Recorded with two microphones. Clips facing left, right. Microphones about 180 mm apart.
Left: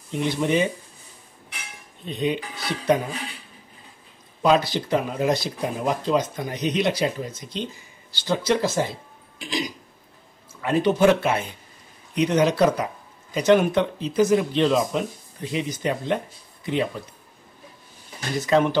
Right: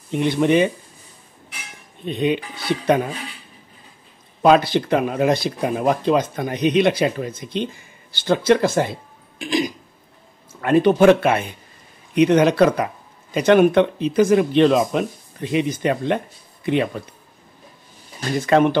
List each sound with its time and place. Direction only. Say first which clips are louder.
0.1 s speech: right 5 dB; 65° right (ahead or behind)
2.0 s speech: right 4 dB; 65° right (ahead or behind)
4.4 s speech: right 5 dB; 60° right (ahead or behind)
9.4 s throat clearing: right 7 dB; 50° right (ahead or behind)
10.6 s speech: right 5 dB; 55° right (ahead or behind)
18.4 s speech: right 4 dB; 55° right (ahead or behind)